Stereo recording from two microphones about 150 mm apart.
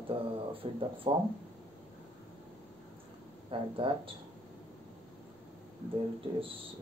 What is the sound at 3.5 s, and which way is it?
Speech, 35° right (ahead or behind).